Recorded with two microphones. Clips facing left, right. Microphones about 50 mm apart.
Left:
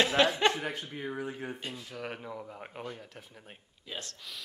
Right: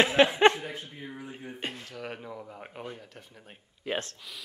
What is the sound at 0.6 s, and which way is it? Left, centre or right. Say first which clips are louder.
Speech: left 2 dB; left.